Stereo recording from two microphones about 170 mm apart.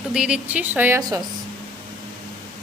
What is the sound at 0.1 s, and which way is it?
A woman's voice, 5° right (ahead or behind).